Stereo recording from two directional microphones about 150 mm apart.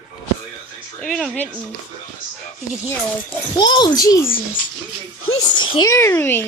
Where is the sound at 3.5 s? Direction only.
30° left (ahead or behind).